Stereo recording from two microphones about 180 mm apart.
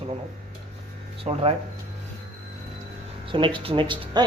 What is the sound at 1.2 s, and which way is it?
Speech, 30° right (ahead or behind).